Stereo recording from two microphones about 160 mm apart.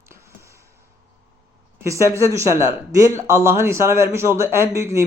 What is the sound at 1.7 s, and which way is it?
Speech, 20° right (ahead or behind).